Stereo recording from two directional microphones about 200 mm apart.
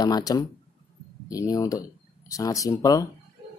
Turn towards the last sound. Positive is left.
turn(degrees=15)  # may be behind; listen again after turning